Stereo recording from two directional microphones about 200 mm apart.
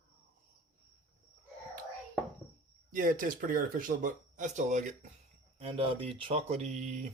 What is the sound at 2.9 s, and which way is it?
Speech, 40° right (ahead or behind).